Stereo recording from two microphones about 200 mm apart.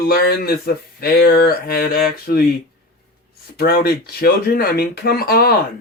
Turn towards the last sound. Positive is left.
turn(degrees=50)  # may be behind; listen again after turning